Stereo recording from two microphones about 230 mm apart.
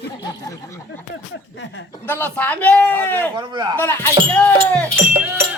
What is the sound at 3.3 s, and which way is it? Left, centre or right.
Speech, centre.